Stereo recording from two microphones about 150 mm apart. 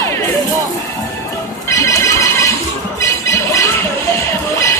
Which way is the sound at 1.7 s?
20° left (ahead or behind).